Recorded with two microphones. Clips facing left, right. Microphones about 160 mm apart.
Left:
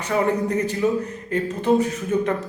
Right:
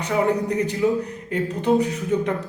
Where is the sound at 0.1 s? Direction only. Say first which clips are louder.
Even; 15° right (ahead or behind).